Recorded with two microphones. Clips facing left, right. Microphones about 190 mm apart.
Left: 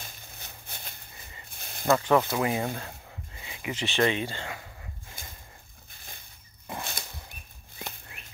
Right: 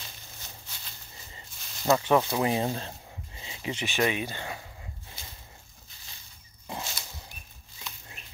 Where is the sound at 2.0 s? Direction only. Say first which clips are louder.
Left 1 dB; 15° right (ahead or behind).